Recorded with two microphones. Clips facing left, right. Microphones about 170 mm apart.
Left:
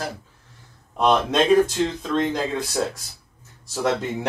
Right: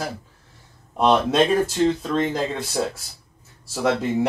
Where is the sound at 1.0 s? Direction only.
5° right (ahead or behind).